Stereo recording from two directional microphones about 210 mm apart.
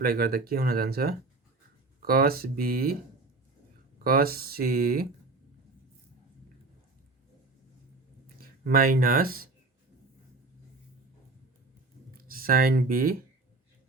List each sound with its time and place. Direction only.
0.0 s speech: 45° right (ahead or behind)
4.0 s speech: 45° right (ahead or behind)
8.4 s speech: 45° right (ahead or behind)
12.1 s speech: 45° right (ahead or behind)